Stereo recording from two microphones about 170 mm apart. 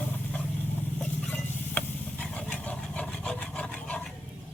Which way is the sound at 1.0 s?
10° left (ahead or behind).